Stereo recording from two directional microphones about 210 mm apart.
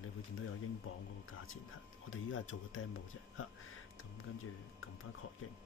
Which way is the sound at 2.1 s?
70° left (ahead or behind).